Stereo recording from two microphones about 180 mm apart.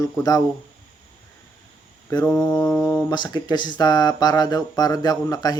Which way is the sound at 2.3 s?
5° left (ahead or behind).